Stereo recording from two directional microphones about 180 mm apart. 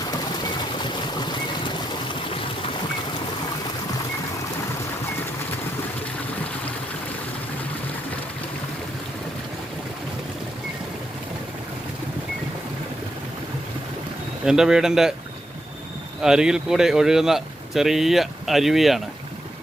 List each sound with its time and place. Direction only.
0.1 s a sound: 25° left (ahead or behind)
14.4 s speech: 5° right (ahead or behind)
16.2 s speech: 5° right (ahead or behind)